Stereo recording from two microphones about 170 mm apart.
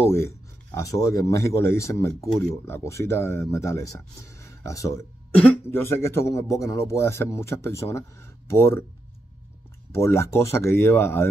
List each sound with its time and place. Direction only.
0.7 s speech: 20° left (ahead or behind)
9.9 s speech: 15° left (ahead or behind)